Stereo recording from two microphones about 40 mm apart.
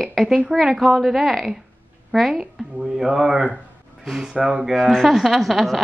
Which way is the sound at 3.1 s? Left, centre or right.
Right.